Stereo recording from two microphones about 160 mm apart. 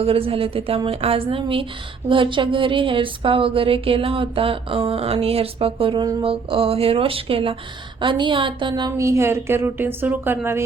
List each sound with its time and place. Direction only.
0.0 s a woman's voice: 35° right (ahead or behind); by 10.6 s 15° right (ahead or behind)